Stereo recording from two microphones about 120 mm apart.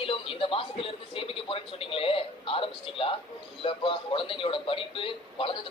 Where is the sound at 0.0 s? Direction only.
50° left (ahead or behind).